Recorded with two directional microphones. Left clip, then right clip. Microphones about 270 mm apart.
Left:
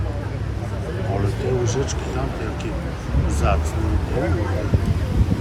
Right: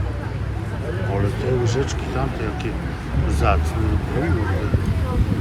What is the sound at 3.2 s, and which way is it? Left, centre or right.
Speech, centre.